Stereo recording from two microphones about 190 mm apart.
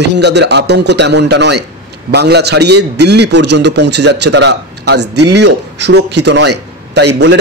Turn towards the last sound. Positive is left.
turn(degrees=-60)  # may be behind; listen again after turning